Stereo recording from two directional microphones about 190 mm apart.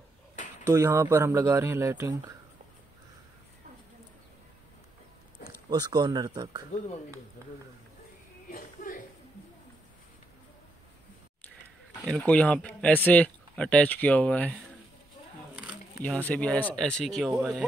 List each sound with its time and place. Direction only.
0.7 s speech: 15° right (ahead or behind)
5.7 s speech: 20° right (ahead or behind)
8.5 s a sound: 45° left (ahead or behind)
12.0 s speech: 5° left (ahead or behind)
16.0 s speech: 10° left (ahead or behind)